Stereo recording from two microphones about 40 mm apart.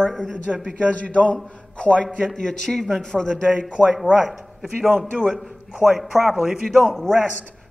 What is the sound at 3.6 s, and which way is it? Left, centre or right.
Speech, right.